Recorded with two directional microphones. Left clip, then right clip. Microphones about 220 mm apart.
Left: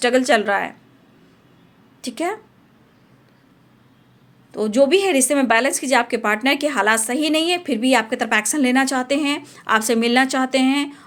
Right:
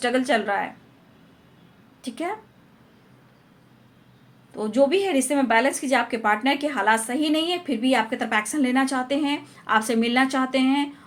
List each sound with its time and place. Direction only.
0.0 s a woman's voice: 45° left (ahead or behind)
2.0 s a woman's voice: 45° left (ahead or behind)
4.5 s a woman's voice: 45° left (ahead or behind)